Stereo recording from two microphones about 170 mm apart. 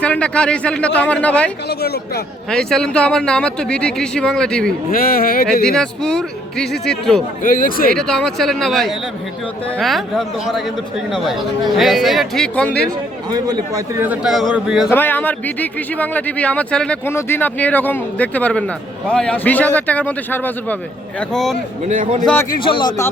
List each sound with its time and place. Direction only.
0.0 s speech: 5° left (ahead or behind)
1.8 s speech: 70° left (ahead or behind)
2.5 s a man's voice: 5° left (ahead or behind)
4.9 s speech: 60° left (ahead or behind)
5.6 s a man's voice: 5° left (ahead or behind)
7.4 s speech: 55° left (ahead or behind)
7.9 s a man's voice: 5° left (ahead or behind)
11.8 s a man's voice: centre (ahead or behind)
13.3 s a man's voice: 25° right (ahead or behind)
14.0 s a man's voice: 5° right (ahead or behind)
14.8 s a man's voice: 10° left (ahead or behind)
21.8 s a man's voice: 40° right (ahead or behind)
22.4 s speech: 30° left (ahead or behind)